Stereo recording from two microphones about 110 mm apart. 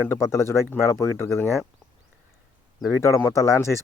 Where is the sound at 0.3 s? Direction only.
25° left (ahead or behind).